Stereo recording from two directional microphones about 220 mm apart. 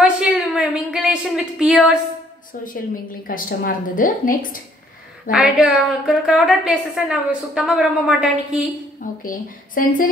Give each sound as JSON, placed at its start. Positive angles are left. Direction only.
{"t": 0.0, "sound": "a sound", "side_deg": -5}
{"t": 3.3, "sound": "a woman's voice", "side_deg": 40}
{"t": 5.3, "sound": "a woman's voice", "side_deg": -5}
{"t": 9.2, "sound": "a woman's voice", "side_deg": 40}